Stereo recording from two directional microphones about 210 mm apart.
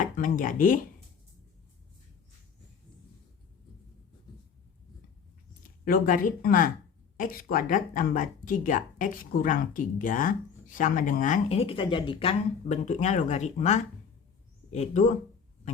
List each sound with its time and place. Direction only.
0.0 s speech: 40° left (ahead or behind)
5.8 s speech: 40° left (ahead or behind)